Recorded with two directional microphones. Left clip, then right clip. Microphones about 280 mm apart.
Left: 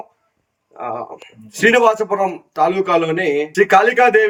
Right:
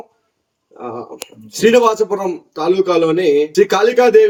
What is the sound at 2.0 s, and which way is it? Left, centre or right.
Speech, left.